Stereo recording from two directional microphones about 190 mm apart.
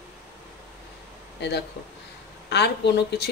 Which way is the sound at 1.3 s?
65° left (ahead or behind).